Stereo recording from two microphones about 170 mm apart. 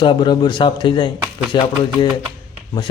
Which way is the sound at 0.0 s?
30° left (ahead or behind).